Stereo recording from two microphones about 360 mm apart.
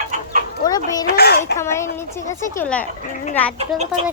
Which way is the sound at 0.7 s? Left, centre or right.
Centre.